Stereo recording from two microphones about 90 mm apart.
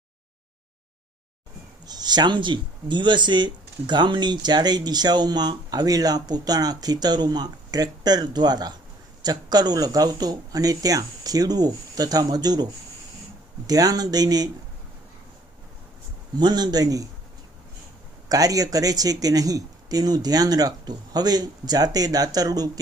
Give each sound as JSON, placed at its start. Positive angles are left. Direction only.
{"t": 1.9, "sound": "speech", "side_deg": -50}
{"t": 13.7, "sound": "speech", "side_deg": -45}
{"t": 16.4, "sound": "speech", "side_deg": -50}
{"t": 18.3, "sound": "speech", "side_deg": -45}